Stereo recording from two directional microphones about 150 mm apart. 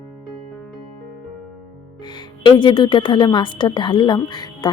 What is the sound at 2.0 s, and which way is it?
A woman's voice, 30° left (ahead or behind).